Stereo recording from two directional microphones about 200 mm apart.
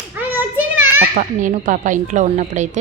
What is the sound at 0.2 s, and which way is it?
Child singing, 10° right (ahead or behind).